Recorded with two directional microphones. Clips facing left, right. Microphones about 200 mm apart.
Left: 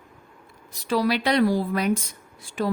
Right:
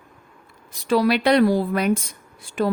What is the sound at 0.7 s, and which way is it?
Speech, 60° right (ahead or behind).